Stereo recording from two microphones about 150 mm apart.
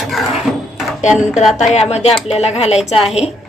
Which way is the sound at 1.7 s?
45° left (ahead or behind).